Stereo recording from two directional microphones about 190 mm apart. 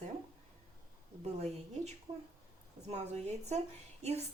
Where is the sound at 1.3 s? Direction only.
35° right (ahead or behind).